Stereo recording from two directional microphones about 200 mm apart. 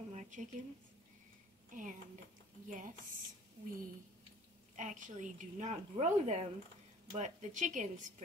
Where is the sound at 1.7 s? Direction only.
40° right (ahead or behind).